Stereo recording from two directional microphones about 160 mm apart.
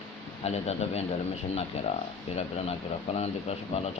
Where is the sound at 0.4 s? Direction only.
40° left (ahead or behind).